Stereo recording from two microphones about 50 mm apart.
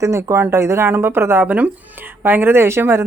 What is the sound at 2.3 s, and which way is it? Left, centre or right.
Speech, right.